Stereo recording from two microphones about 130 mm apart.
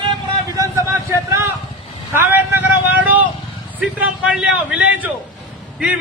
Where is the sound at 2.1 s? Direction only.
15° right (ahead or behind).